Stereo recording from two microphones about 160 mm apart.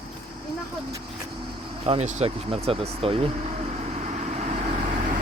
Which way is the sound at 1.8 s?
40° right (ahead or behind).